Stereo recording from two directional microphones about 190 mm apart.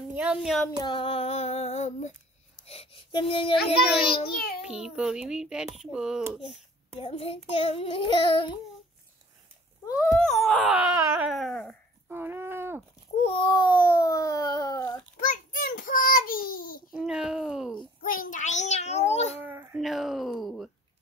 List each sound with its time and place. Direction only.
0.1 s speech: 5° right (ahead or behind)
0.8 s female singing: 25° left (ahead or behind)
2.5 s speech: 30° left (ahead or behind)
4.6 s a child's voice: 5° right (ahead or behind)
7.0 s child singing: 30° left (ahead or behind)
10.0 s a child's voice: centre (ahead or behind)
12.1 s a sound: 10° right (ahead or behind)
13.2 s a sound: 30° left (ahead or behind)
15.1 s child singing: 45° left (ahead or behind)
16.9 s a sound: 5° right (ahead or behind)
18.0 s child singing: 45° left (ahead or behind)
19.4 s babbling: 10° right (ahead or behind)
19.8 s a child's voice: centre (ahead or behind)